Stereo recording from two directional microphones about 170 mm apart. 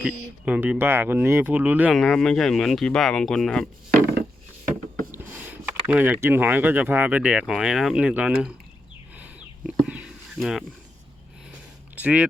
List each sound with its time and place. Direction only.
0.0 s speech: 10° right (ahead or behind)
2.0 s speech: 5° left (ahead or behind)
5.1 s speech: 10° right (ahead or behind)
9.1 s chicken: 10° right (ahead or behind)
9.8 s a sound: 5° right (ahead or behind)
11.9 s speech: 5° right (ahead or behind)